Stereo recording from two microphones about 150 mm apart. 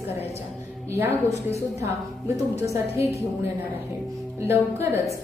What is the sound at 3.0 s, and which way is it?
Speech, 15° right (ahead or behind).